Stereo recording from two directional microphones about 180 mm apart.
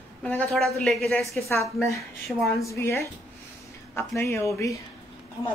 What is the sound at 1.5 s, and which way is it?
A woman's voice, 15° left (ahead or behind).